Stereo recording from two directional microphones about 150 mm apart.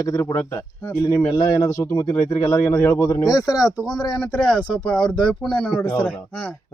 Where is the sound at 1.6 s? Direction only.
25° left (ahead or behind).